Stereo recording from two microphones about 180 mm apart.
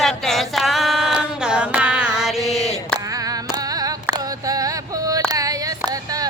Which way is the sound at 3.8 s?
20° right (ahead or behind).